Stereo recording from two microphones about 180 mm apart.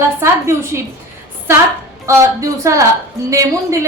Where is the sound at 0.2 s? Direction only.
15° right (ahead or behind).